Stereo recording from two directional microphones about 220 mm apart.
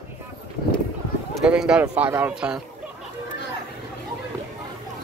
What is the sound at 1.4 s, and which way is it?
Speech, 5° right (ahead or behind).